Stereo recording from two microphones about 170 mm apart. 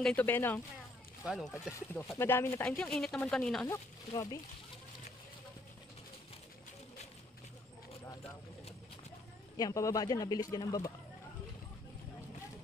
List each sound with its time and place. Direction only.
0.0 s speech: 10° left (ahead or behind)
1.2 s speech: centre (ahead or behind)
1.5 s speech: 15° left (ahead or behind)
3.6 s speech: 20° left (ahead or behind)
9.6 s speech: 20° left (ahead or behind)